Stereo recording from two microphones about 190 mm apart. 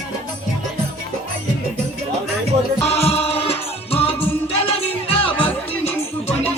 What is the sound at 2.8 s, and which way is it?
Music, 30° left (ahead or behind).